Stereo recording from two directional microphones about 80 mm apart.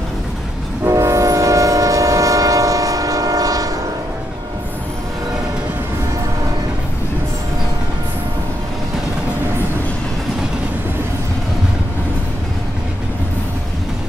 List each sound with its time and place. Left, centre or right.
0.8 s train: right